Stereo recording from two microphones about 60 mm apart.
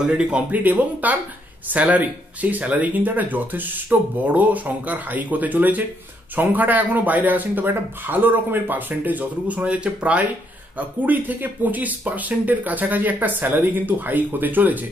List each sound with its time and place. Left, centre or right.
0.0 s speech: centre
0.7 s speech: right